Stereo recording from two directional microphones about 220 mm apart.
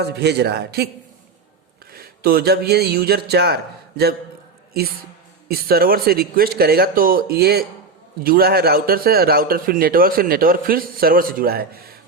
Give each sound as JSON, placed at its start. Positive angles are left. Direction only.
{"t": 0.0, "sound": "speech", "side_deg": -50}
{"t": 1.9, "sound": "speech", "side_deg": -45}
{"t": 5.5, "sound": "a man's voice", "side_deg": -45}